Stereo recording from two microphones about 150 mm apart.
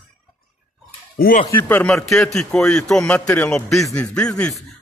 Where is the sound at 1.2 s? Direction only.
75° left (ahead or behind).